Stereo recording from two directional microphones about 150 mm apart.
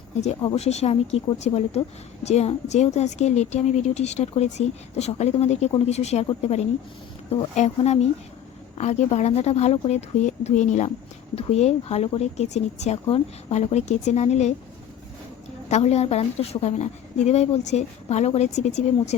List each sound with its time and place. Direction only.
0.4 s a woman's voice: 45° left (ahead or behind)
7.5 s a woman's voice: 50° left (ahead or behind)
15.7 s a woman's voice: 45° left (ahead or behind)